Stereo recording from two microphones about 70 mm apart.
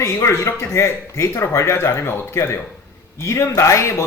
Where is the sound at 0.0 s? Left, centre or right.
Left.